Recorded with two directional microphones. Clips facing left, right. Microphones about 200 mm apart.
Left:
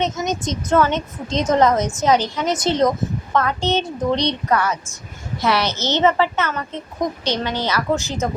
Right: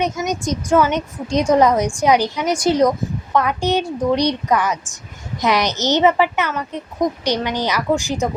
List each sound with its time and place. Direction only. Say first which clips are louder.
0.0 s a woman's voice: right 1 dB; 10° right (ahead or behind)